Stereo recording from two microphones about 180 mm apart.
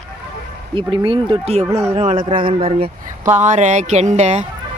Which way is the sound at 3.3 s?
40° right (ahead or behind).